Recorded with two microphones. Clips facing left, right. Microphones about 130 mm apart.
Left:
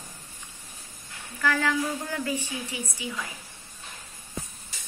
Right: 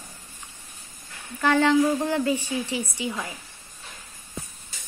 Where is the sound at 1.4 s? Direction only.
30° right (ahead or behind).